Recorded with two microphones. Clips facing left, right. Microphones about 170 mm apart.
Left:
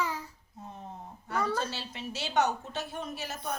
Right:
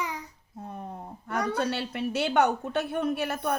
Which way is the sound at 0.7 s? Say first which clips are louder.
Right 6 dB; 55° right (ahead or behind).